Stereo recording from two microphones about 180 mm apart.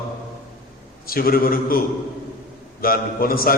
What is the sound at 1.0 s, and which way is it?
Speech, 55° left (ahead or behind).